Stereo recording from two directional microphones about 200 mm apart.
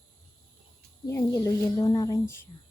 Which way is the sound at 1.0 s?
15° left (ahead or behind).